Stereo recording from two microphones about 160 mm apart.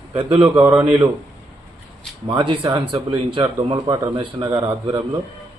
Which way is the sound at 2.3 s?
30° right (ahead or behind).